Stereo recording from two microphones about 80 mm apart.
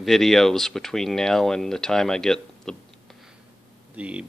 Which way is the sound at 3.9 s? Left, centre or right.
Centre.